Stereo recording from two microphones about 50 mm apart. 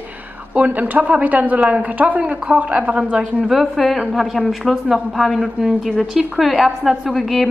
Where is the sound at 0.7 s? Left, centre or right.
Right.